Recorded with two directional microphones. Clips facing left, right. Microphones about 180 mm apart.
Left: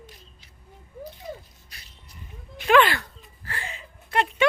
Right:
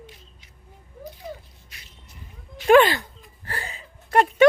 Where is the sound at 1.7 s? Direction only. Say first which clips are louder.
Even; 35° left (ahead or behind).